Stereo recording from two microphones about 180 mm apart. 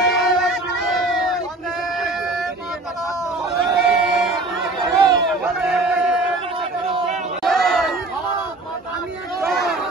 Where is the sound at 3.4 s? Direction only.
Centre (ahead or behind).